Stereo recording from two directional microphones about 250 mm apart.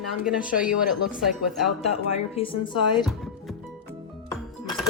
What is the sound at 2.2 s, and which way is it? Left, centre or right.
Speech, left.